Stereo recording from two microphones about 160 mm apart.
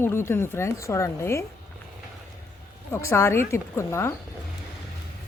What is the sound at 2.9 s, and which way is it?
Speech, 15° left (ahead or behind).